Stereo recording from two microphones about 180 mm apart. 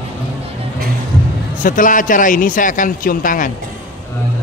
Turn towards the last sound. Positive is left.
turn(degrees=50)  # may be behind; listen again after turning